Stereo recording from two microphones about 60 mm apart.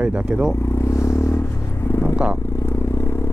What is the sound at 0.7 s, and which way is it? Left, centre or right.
Vehicle, left.